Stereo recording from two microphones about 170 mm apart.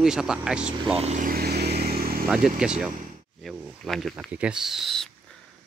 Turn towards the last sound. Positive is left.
turn(degrees=0)  # may be behind; listen again after turning